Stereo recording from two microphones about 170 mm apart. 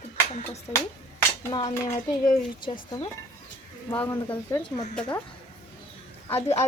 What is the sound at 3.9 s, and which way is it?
Speech, 10° left (ahead or behind).